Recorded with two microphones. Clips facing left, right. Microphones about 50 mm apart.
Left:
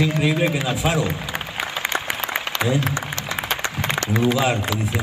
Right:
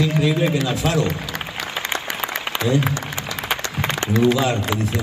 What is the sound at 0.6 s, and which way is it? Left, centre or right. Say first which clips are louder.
Applause: right 1 dB; centre.